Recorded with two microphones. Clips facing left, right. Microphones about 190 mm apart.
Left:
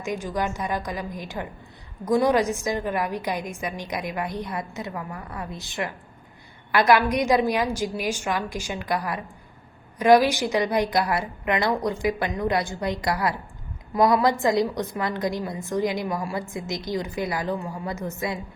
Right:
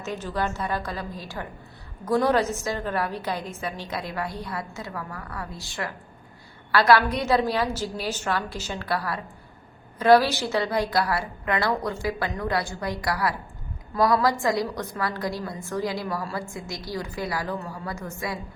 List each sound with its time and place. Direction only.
0.0 s a woman's voice: 15° left (ahead or behind)